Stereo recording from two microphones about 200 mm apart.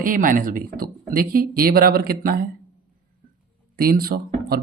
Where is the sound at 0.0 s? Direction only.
45° right (ahead or behind).